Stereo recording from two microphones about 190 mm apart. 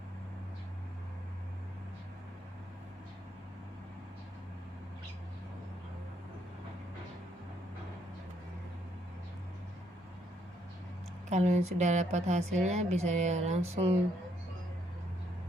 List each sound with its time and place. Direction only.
11.3 s a woman's voice: 40° right (ahead or behind)